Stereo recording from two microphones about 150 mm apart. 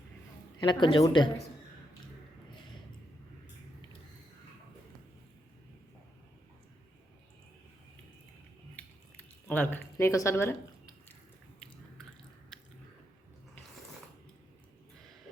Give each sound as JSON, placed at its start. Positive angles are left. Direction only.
{"t": 0.6, "sound": "speech", "side_deg": 30}
{"t": 9.5, "sound": "speech", "side_deg": 10}